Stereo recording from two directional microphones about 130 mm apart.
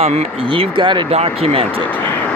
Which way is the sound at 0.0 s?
50° right (ahead or behind).